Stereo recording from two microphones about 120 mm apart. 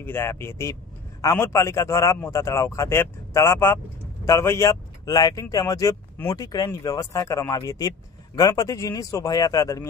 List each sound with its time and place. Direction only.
0.0 s speech: 20° left (ahead or behind)